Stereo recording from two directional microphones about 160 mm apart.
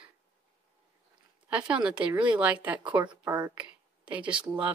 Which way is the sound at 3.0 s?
30° right (ahead or behind).